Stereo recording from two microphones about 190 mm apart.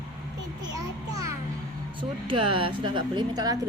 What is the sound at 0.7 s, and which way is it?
A child's voice, 20° right (ahead or behind).